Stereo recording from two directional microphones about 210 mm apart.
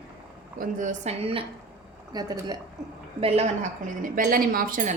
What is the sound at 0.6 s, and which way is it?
A woman's voice, 35° right (ahead or behind).